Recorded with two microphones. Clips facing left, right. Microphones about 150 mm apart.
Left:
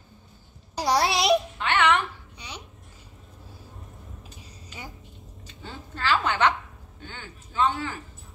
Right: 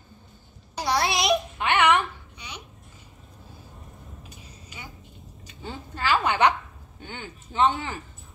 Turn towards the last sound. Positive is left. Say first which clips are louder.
# right 2 dB
turn(degrees=-20)  # may be behind; listen again after turning